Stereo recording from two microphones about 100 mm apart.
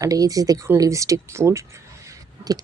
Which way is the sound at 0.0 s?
35° right (ahead or behind).